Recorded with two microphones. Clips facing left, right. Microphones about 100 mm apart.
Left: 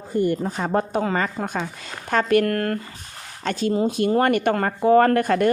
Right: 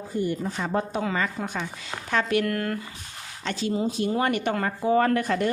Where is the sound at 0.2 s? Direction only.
50° left (ahead or behind).